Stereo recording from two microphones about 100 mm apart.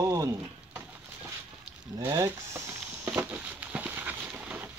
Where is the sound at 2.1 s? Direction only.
35° right (ahead or behind).